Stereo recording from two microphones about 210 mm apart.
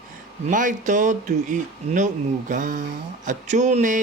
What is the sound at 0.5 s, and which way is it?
Speech, 40° right (ahead or behind).